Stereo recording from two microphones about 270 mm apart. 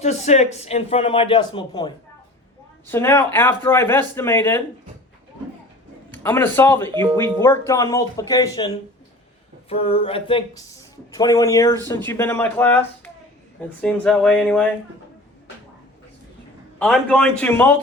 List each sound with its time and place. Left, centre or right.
0.0 s a man's voice: left; by 4.6 s centre
6.2 s speech: centre
16.8 s speech: centre